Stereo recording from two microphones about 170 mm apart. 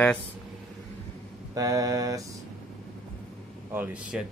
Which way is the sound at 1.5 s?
20° right (ahead or behind).